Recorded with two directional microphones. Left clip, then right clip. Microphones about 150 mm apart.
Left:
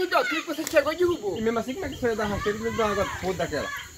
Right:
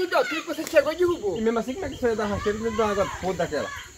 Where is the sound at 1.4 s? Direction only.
5° left (ahead or behind).